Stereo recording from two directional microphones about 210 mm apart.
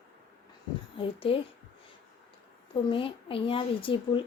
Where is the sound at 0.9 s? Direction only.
25° left (ahead or behind).